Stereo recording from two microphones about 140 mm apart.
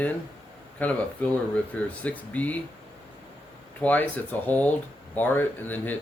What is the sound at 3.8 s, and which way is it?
Speech, 10° left (ahead or behind).